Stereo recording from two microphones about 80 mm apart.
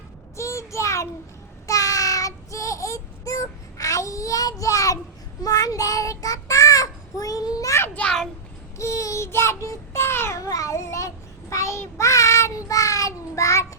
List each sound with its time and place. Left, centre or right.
0.3 s child singing: left
8.0 s a child's voice: centre
8.8 s child singing: left